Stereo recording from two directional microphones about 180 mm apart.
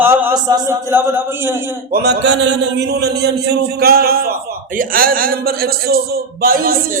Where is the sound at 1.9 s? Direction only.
70° right (ahead or behind).